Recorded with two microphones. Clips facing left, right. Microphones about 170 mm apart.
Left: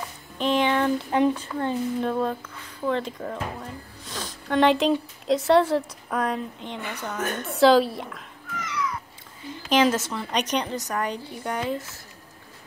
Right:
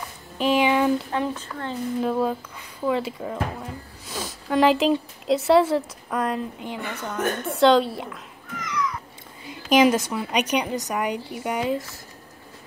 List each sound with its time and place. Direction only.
0.4 s a sound: 10° right (ahead or behind)
1.1 s a woman's voice: 15° left (ahead or behind)
2.0 s a woman's voice: 5° right (ahead or behind)
9.5 s a woman's voice: 10° right (ahead or behind)